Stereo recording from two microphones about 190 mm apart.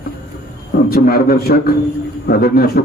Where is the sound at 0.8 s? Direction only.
50° left (ahead or behind).